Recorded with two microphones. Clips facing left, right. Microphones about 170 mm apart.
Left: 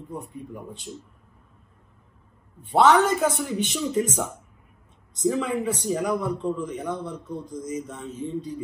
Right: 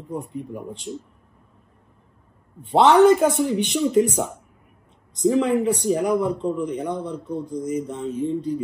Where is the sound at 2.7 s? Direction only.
15° right (ahead or behind).